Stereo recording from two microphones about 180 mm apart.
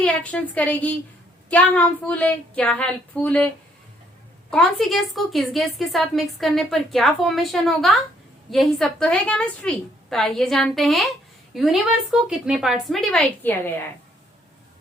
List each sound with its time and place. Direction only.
0.0 s a woman's voice: 5° left (ahead or behind)
4.5 s a woman's voice: centre (ahead or behind)